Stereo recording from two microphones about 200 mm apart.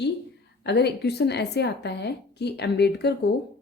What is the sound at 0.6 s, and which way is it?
A woman's voice, 55° left (ahead or behind).